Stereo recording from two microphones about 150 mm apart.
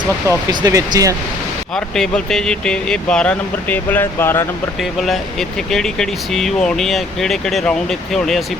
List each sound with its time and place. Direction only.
0.3 s speech: 25° right (ahead or behind)
1.7 s speech: 5° left (ahead or behind)
4.8 s speech: centre (ahead or behind)